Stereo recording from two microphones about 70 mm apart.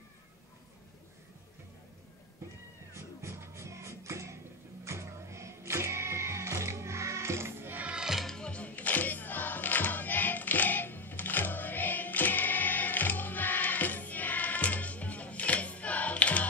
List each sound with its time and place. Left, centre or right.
2.9 s music: right
7.8 s music: centre
8.3 s music: centre